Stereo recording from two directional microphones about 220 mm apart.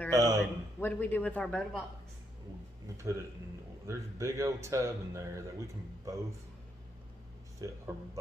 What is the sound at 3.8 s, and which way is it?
Speech, 15° right (ahead or behind).